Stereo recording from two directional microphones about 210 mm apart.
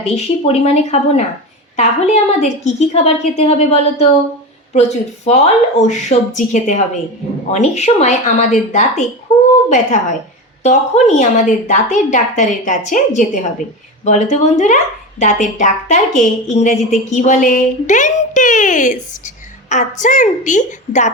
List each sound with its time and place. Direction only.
0.0 s a woman's voice: 30° left (ahead or behind)
9.3 s a sound: 30° left (ahead or behind)
9.6 s a woman's voice: 35° left (ahead or behind)